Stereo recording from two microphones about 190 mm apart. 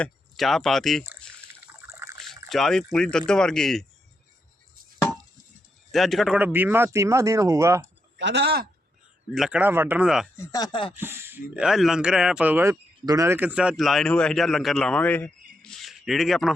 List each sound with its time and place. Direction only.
0.0 s speech: centre (ahead or behind)
1.6 s water: 10° right (ahead or behind)
2.5 s speech: centre (ahead or behind)
5.9 s speech: centre (ahead or behind); by 7.9 s 15° right (ahead or behind)
8.2 s speech: 65° right (ahead or behind)
9.3 s speech: 5° right (ahead or behind)
10.3 s speech: 15° left (ahead or behind)
10.9 s speech: 10° right (ahead or behind)